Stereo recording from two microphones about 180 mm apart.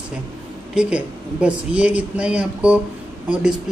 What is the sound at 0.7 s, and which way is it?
A woman's voice, 5° right (ahead or behind).